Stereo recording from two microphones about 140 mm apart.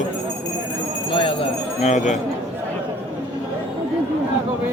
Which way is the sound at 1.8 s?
60° left (ahead or behind).